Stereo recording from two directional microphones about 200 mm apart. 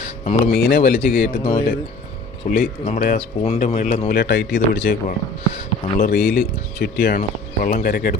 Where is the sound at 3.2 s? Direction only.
30° left (ahead or behind).